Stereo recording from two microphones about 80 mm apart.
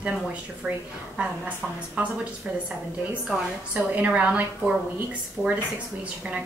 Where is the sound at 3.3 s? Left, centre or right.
Centre.